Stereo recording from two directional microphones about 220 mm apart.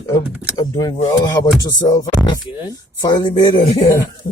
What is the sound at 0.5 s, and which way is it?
Speech, 20° left (ahead or behind).